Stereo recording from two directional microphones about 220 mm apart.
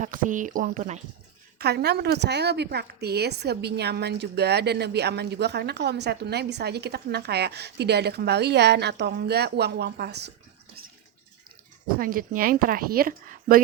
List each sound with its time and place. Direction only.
0.0 s speech: 35° right (ahead or behind)
1.5 s a woman's voice: 45° right (ahead or behind)
11.9 s speech: 40° right (ahead or behind)